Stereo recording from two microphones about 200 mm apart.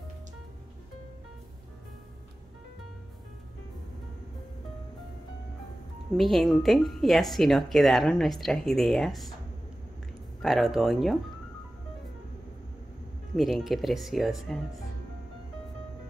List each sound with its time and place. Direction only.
6.1 s speech: centre (ahead or behind)
10.4 s speech: centre (ahead or behind)
13.4 s speech: centre (ahead or behind)